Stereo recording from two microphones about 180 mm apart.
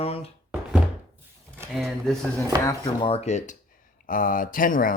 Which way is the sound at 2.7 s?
25° left (ahead or behind).